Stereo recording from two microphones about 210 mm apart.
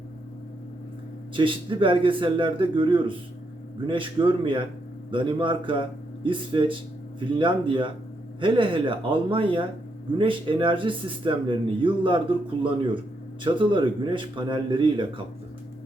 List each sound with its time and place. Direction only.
1.4 s speech: 25° right (ahead or behind)